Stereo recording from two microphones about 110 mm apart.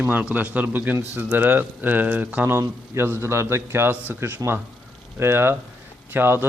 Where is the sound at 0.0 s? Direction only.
15° right (ahead or behind).